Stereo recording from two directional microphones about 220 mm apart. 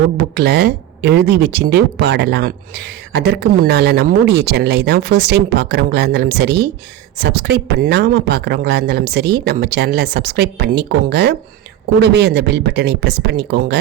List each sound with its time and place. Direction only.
0.2 s speech: 45° right (ahead or behind)